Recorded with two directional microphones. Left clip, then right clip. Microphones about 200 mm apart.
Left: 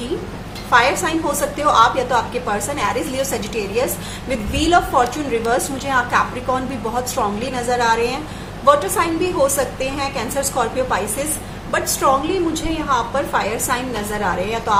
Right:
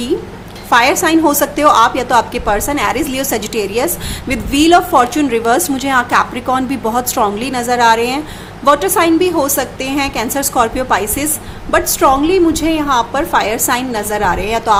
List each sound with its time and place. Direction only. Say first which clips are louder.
0.7 s a woman's voice: right 5 dB; 50° right (ahead or behind)